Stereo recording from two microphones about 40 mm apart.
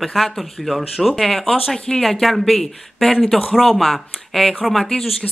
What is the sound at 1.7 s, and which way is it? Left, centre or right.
Speech, left.